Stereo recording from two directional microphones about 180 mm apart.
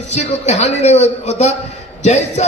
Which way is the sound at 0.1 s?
40° left (ahead or behind).